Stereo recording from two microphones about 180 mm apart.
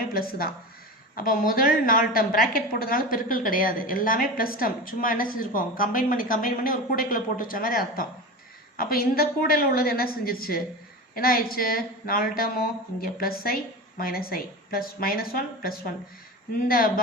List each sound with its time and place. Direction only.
0.1 s a woman's voice: 55° left (ahead or behind)